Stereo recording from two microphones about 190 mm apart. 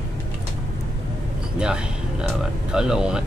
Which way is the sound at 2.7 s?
5° right (ahead or behind).